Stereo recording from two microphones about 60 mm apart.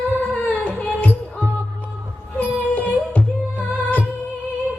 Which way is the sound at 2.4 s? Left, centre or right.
Left.